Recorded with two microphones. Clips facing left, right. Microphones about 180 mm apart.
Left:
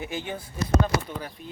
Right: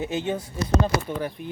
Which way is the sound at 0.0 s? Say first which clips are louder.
Right 6 dB; 20° right (ahead or behind).